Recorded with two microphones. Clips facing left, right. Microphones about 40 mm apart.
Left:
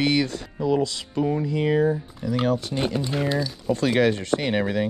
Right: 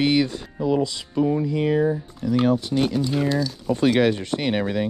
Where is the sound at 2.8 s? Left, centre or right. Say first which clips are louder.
Right 3 dB; centre.